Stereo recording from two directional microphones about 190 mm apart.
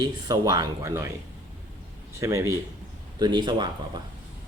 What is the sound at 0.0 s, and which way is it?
Speech, 20° right (ahead or behind).